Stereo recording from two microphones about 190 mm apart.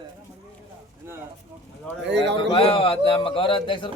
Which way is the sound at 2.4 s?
30° left (ahead or behind).